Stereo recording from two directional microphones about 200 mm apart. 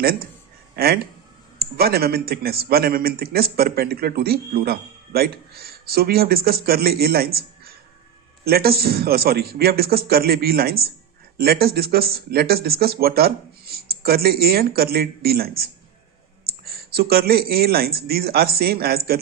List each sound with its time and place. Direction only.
0.8 s a man's voice: 50° right (ahead or behind)